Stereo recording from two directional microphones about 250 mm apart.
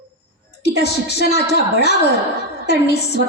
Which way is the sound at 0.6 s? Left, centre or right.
Left.